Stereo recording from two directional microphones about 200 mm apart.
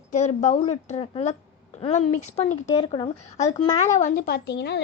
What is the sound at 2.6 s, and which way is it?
Speech, 25° left (ahead or behind).